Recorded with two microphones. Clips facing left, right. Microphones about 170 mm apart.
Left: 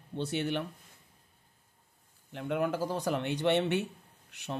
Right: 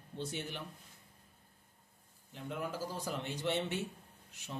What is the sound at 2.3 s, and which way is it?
A woman's voice, 70° left (ahead or behind).